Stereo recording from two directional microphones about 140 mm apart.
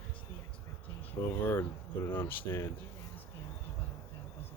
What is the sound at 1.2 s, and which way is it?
Speech, 15° left (ahead or behind).